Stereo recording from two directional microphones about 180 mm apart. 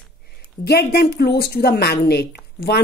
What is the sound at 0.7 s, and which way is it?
A woman's voice, 60° left (ahead or behind).